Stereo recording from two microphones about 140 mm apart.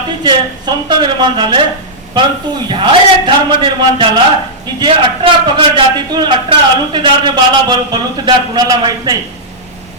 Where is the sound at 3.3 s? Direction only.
35° right (ahead or behind).